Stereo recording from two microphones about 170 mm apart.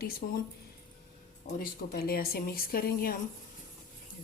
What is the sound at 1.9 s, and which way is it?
Speech, 60° left (ahead or behind).